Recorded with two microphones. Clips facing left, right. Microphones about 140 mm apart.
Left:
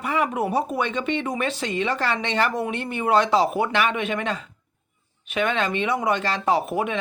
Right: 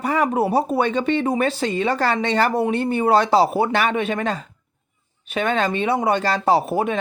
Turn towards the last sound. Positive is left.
turn(degrees=-35)  # may be behind; listen again after turning